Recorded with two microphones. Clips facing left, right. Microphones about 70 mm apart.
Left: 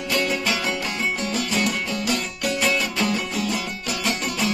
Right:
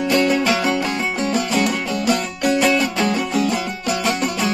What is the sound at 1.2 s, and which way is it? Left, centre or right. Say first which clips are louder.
Music: right 7 dB; right.